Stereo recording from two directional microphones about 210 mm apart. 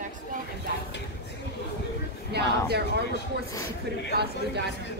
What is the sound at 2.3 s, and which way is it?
Speech, 50° right (ahead or behind).